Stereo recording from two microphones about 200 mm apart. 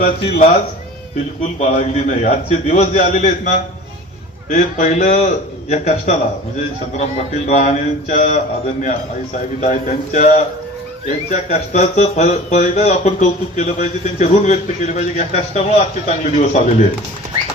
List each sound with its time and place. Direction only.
0.0 s speech: 30° left (ahead or behind)
1.5 s speech: 35° left (ahead or behind)
7.4 s speech: 35° left (ahead or behind)